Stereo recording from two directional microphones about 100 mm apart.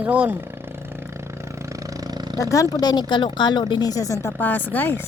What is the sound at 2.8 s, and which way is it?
Speech, 45° left (ahead or behind).